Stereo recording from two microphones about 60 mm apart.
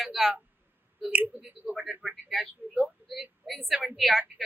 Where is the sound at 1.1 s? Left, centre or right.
Right.